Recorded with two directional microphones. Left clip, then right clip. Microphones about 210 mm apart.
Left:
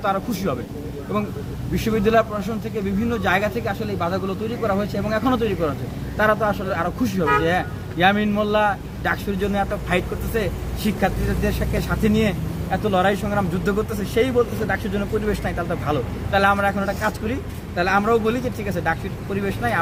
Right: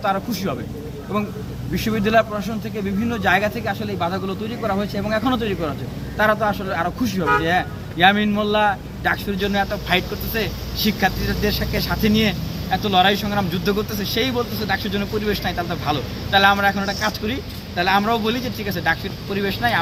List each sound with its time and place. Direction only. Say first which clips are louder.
0.0 s speech: right 1 dB; centre (ahead or behind)
1.8 s speech: even; centre (ahead or behind)